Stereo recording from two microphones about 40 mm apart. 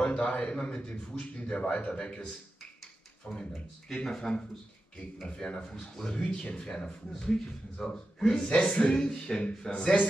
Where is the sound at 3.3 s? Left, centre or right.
Left.